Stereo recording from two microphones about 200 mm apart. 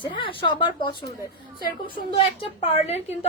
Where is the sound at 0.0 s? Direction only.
25° left (ahead or behind).